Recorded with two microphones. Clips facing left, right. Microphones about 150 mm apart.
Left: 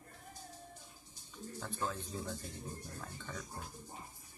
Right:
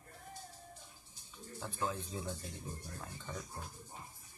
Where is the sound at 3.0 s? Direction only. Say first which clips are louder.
Even; 5° right (ahead or behind).